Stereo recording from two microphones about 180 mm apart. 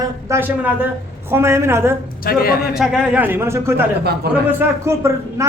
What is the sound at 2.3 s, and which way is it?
Speech, 55° left (ahead or behind).